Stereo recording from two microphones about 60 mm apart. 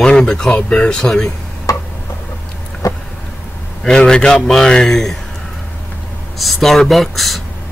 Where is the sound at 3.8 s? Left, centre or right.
Centre.